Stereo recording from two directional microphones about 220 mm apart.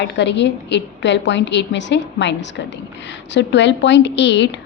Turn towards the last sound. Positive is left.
turn(degrees=55)  # may be behind; listen again after turning